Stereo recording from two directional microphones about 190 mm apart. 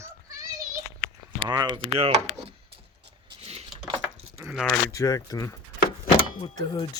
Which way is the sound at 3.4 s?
30° right (ahead or behind).